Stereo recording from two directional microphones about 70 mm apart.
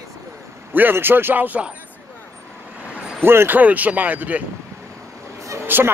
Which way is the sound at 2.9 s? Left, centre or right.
Centre.